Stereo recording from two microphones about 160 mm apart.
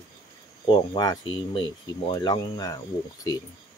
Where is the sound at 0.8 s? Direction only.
25° left (ahead or behind).